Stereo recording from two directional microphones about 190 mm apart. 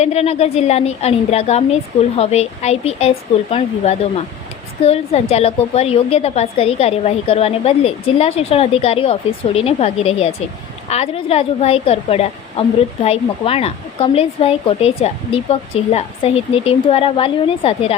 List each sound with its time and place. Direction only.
0.0 s a woman's voice: 35° left (ahead or behind)